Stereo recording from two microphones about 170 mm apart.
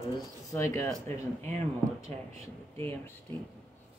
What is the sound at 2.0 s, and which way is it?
Speech, 35° right (ahead or behind).